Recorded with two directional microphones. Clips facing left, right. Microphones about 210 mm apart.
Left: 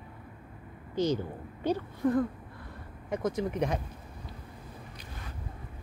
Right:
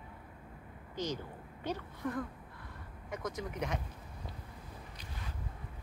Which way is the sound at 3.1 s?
30° left (ahead or behind).